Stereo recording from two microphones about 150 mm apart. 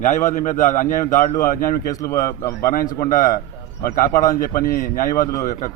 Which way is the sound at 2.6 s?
75° left (ahead or behind).